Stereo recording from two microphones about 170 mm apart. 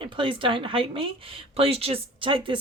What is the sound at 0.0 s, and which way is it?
A woman's voice, 30° right (ahead or behind).